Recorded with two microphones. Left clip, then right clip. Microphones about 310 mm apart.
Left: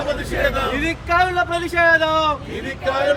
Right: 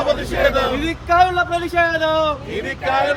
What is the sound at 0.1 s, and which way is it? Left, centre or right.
Speech, right.